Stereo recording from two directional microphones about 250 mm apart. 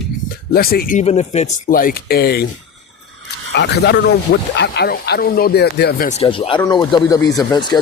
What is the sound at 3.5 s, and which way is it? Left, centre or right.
Speech, left.